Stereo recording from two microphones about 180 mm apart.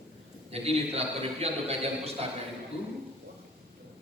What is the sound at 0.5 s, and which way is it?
A man's voice, 35° right (ahead or behind).